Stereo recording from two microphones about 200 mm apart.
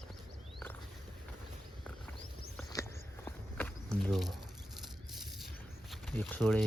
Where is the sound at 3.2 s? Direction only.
10° left (ahead or behind).